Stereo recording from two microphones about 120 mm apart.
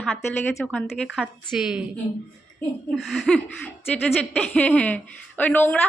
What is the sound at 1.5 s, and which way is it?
Speech, 5° right (ahead or behind).